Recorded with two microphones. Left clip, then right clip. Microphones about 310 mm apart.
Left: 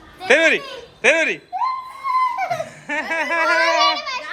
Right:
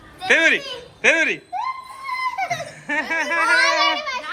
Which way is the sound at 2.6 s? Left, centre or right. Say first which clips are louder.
Even; centre.